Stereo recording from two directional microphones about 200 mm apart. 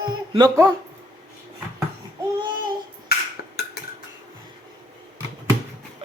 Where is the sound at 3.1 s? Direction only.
50° left (ahead or behind).